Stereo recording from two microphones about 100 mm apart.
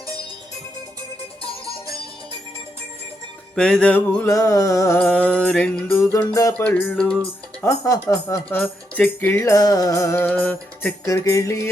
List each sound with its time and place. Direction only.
3.5 s music: 5° left (ahead or behind)
4.3 s music: 35° left (ahead or behind)
4.9 s music: 15° left (ahead or behind)
6.1 s music: 30° left (ahead or behind)
6.5 s music: 20° left (ahead or behind)
7.7 s music: 35° left (ahead or behind)
8.5 s speech: 20° left (ahead or behind)
9.4 s music: 35° left (ahead or behind)
10.2 s music: 15° left (ahead or behind)
11.0 s music: 30° left (ahead or behind)